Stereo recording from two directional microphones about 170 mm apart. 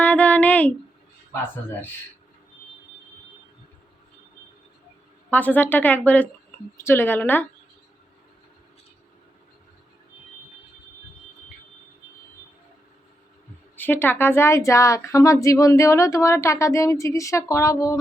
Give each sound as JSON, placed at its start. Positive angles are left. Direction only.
{"t": 0.0, "sound": "a sound", "side_deg": 10}
{"t": 5.3, "sound": "a woman's voice", "side_deg": 10}
{"t": 13.7, "sound": "speech", "side_deg": 10}